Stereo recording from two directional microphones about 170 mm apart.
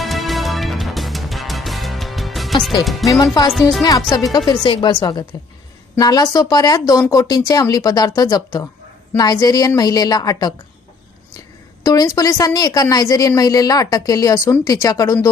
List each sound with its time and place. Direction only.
0.0 s music: centre (ahead or behind)
3.0 s speech: centre (ahead or behind)
4.1 s a woman's voice: 20° left (ahead or behind)
11.8 s a woman's voice: 20° left (ahead or behind)